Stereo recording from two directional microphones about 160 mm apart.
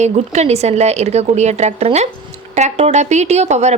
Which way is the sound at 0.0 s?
45° right (ahead or behind).